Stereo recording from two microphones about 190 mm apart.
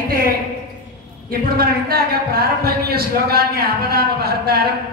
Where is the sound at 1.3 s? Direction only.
55° right (ahead or behind).